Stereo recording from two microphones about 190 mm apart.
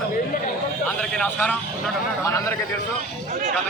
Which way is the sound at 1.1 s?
5° left (ahead or behind).